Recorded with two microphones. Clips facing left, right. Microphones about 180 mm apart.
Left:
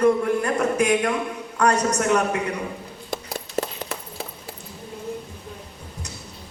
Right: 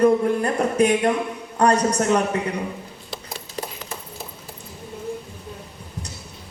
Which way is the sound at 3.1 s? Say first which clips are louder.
Left 6 dB; 50° left (ahead or behind).